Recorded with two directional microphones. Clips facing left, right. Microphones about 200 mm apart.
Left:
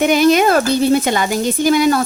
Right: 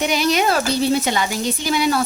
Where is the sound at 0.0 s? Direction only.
50° left (ahead or behind).